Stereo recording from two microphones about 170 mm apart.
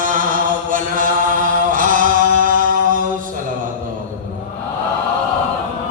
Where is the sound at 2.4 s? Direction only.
50° right (ahead or behind).